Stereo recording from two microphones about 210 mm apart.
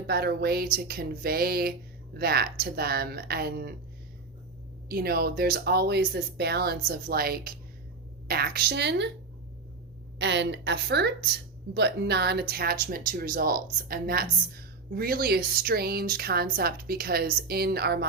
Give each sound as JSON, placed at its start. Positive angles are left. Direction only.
{"t": 0.1, "sound": "speech", "side_deg": -50}
{"t": 4.9, "sound": "speech", "side_deg": -45}
{"t": 10.2, "sound": "a woman's voice", "side_deg": -55}